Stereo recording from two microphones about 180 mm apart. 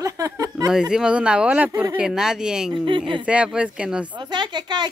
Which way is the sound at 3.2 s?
5° right (ahead or behind).